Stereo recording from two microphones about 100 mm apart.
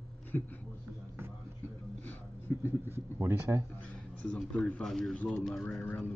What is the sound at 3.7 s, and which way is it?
Speech, 15° left (ahead or behind).